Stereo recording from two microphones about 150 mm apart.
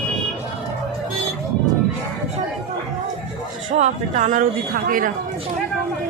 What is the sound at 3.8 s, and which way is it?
Speech, 55° right (ahead or behind).